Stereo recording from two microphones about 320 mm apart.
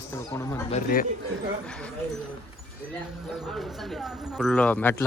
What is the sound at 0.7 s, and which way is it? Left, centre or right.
Speech, left.